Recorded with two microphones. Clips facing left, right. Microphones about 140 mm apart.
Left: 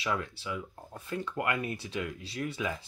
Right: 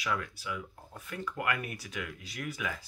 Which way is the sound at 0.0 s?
30° left (ahead or behind).